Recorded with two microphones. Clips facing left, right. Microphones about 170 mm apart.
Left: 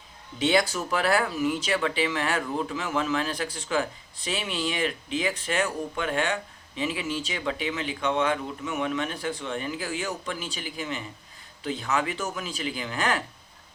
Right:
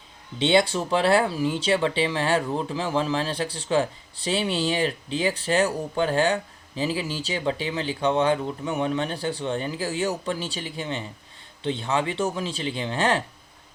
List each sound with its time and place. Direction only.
0.3 s speech: 30° right (ahead or behind)